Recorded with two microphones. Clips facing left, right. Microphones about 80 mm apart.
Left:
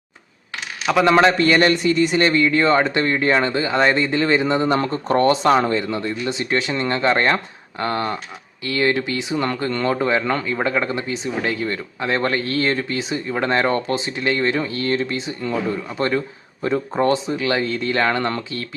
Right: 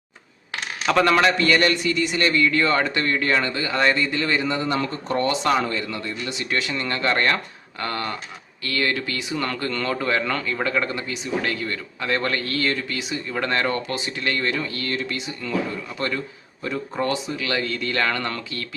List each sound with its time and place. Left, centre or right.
1.0 s a man's voice: left